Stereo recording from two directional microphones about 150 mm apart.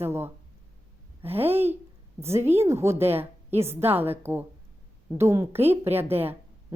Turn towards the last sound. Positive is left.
turn(degrees=-15)  # may be behind; listen again after turning